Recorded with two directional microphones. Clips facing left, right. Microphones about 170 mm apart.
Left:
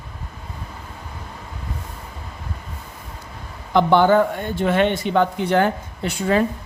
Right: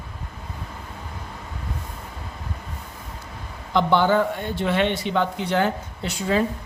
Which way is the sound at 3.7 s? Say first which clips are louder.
Left 4 dB; 50° left (ahead or behind).